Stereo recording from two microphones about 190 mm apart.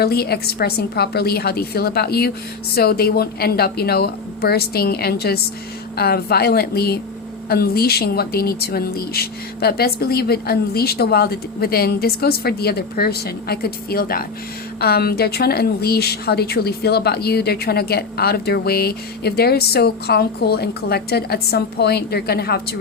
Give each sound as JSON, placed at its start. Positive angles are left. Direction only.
{"t": 0.0, "sound": "speech", "side_deg": 55}